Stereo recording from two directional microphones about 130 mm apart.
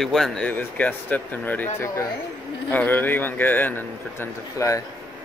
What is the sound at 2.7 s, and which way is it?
A man's voice, 15° left (ahead or behind).